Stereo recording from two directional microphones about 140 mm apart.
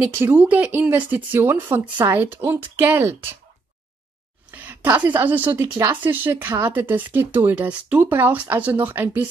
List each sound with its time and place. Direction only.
0.0 s speech: 15° right (ahead or behind)
4.5 s speech: 15° right (ahead or behind)